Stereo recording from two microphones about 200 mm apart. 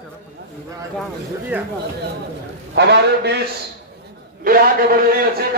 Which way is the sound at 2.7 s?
55° right (ahead or behind).